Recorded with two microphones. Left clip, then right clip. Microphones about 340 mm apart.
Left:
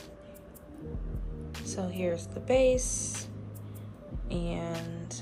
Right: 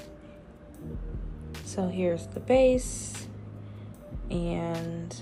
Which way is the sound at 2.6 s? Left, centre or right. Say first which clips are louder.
Right 2 dB; left.